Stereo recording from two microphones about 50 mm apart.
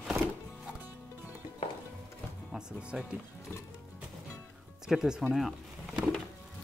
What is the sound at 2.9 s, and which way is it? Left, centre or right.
Speech, right.